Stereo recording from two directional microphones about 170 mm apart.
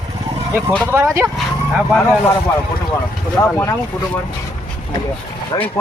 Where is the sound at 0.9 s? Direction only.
15° right (ahead or behind).